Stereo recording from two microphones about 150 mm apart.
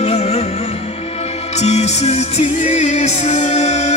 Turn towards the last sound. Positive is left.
turn(degrees=50)  # may be behind; listen again after turning